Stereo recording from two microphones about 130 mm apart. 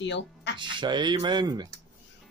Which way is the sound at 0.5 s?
35° right (ahead or behind).